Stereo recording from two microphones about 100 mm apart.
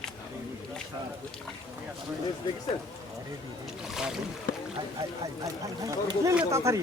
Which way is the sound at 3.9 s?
5° right (ahead or behind).